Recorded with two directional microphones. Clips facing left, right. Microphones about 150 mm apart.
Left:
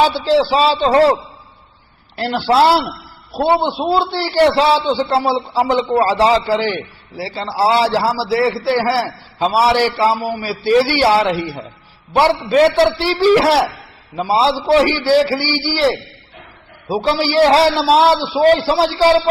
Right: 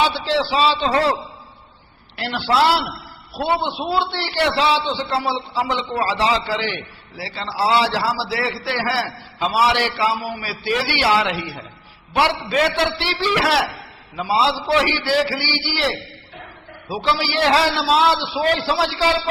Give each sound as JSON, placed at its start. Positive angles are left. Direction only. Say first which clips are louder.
{"t": 0.0, "sound": "a man's voice", "louder": "left 6 dB", "side_deg": 40}
{"t": 2.1, "sound": "a man's voice", "louder": "left 5 dB", "side_deg": 40}
{"t": 16.9, "sound": "a man's voice", "louder": "left 6 dB", "side_deg": 40}